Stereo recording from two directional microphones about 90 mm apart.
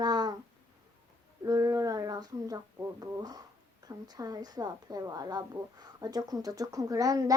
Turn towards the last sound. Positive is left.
turn(degrees=-40)  # may be behind; listen again after turning